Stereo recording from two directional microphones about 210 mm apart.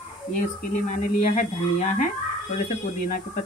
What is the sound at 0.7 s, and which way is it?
Speech, 35° left (ahead or behind).